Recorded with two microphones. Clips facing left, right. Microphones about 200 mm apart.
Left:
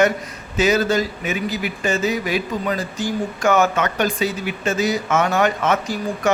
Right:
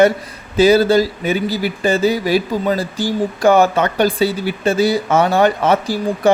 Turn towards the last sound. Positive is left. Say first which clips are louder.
# right 6 dB
turn(degrees=-30)  # may be behind; listen again after turning